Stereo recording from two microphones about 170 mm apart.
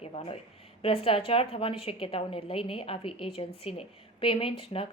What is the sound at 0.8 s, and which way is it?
A woman's voice, 35° left (ahead or behind).